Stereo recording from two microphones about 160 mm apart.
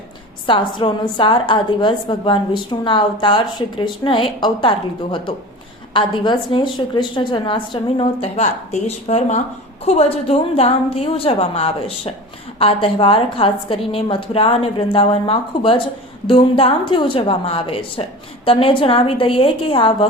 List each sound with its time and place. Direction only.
0.4 s a woman's voice: 30° left (ahead or behind)
5.9 s a woman's voice: 30° left (ahead or behind)